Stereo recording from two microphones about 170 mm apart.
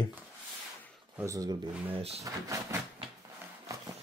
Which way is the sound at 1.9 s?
35° right (ahead or behind).